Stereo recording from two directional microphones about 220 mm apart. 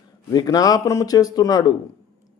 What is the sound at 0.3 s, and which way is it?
Speech, 15° left (ahead or behind).